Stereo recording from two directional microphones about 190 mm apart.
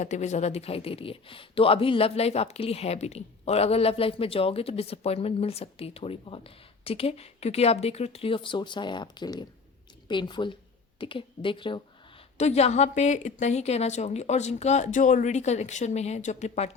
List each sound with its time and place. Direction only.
0.0 s speech: 40° left (ahead or behind)